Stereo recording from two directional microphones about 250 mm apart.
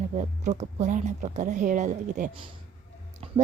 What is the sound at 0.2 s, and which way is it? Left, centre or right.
A woman's voice, right.